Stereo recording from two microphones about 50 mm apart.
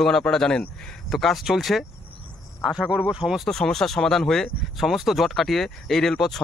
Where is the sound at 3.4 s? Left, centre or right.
Centre.